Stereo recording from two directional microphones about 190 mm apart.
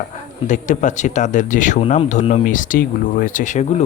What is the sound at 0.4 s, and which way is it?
Speech, 40° left (ahead or behind).